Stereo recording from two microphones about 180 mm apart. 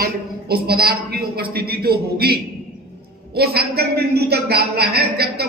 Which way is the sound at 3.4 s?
60° right (ahead or behind).